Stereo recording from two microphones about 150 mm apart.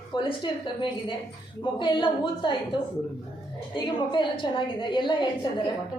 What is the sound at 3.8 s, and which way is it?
A woman's voice, 30° left (ahead or behind).